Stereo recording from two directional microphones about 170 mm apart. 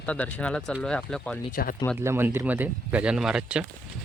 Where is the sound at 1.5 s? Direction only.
55° left (ahead or behind).